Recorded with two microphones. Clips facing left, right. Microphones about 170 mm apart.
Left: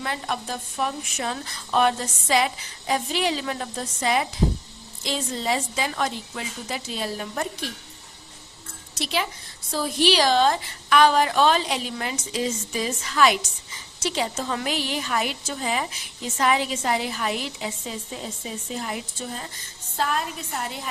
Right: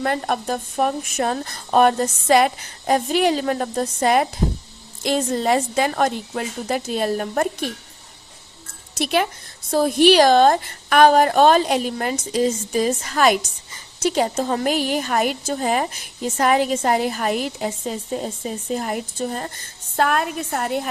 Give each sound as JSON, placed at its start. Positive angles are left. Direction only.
{"t": 0.0, "sound": "a woman's voice", "side_deg": -50}
{"t": 9.0, "sound": "a woman's voice", "side_deg": -55}